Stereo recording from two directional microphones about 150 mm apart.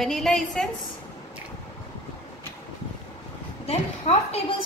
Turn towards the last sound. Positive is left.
turn(degrees=45)  # may be behind; listen again after turning